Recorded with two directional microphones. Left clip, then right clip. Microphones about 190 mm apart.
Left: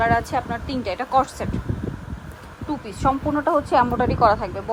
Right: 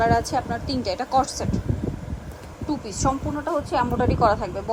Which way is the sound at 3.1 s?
Centre (ahead or behind).